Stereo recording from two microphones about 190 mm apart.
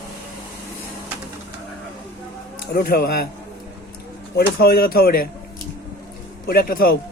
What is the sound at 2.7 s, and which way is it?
Speech, 50° left (ahead or behind).